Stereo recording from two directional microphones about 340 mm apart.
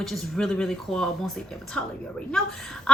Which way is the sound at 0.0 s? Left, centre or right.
Centre.